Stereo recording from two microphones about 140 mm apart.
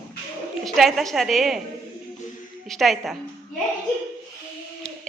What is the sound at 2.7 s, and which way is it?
Speech, centre (ahead or behind).